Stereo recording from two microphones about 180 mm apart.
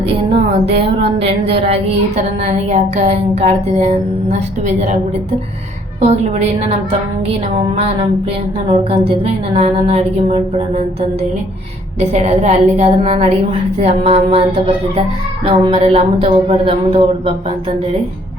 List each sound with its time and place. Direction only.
2.4 s a woman's voice: 40° right (ahead or behind)
6.0 s a woman's voice: 40° right (ahead or behind)